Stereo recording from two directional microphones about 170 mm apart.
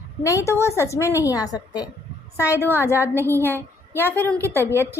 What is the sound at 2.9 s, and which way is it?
Speech, 15° right (ahead or behind).